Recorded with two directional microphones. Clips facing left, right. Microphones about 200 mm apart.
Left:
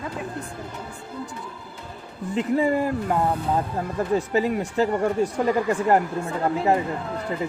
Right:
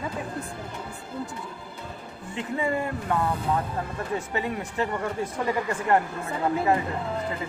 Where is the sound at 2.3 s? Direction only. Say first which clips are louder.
Left 6 dB; 35° left (ahead or behind).